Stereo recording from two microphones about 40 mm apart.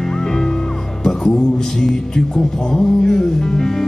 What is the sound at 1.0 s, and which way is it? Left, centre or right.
Music, centre.